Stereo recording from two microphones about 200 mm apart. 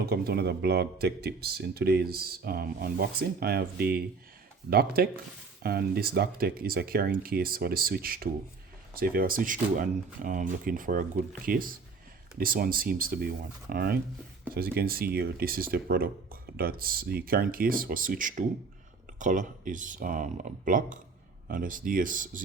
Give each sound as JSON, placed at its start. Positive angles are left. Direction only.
{"t": 0.0, "sound": "speech", "side_deg": -50}